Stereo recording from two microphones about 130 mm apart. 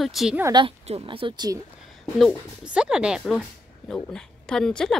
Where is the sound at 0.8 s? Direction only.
50° right (ahead or behind); by 1.6 s 35° right (ahead or behind).